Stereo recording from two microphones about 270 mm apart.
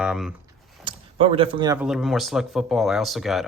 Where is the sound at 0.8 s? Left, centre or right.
Right.